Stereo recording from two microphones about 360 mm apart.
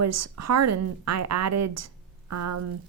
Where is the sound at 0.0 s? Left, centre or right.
Right.